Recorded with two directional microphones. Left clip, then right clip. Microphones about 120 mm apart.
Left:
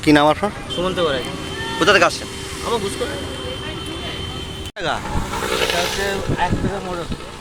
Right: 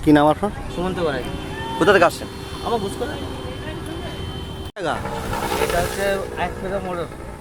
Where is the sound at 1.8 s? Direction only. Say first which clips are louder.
Left 1 dB; 55° right (ahead or behind).